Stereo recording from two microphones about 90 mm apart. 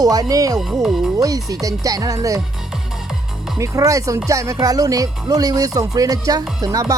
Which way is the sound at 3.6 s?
40° right (ahead or behind).